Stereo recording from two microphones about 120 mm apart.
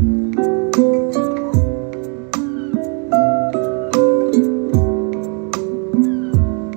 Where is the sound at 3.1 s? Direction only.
15° right (ahead or behind).